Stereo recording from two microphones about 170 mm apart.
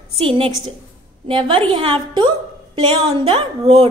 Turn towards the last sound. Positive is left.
turn(degrees=-30)  # may be behind; listen again after turning